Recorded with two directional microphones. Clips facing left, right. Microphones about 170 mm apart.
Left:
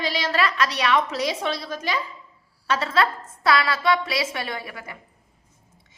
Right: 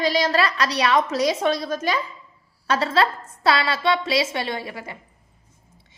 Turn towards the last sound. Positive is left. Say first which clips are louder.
# right 4 dB
turn(degrees=-25)  # may be behind; listen again after turning